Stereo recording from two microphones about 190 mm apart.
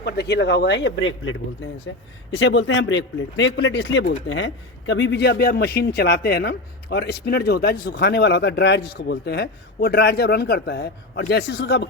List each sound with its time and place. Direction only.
0.0 s speech: 65° left (ahead or behind); by 2.0 s 90° left
2.3 s speech: 70° left (ahead or behind)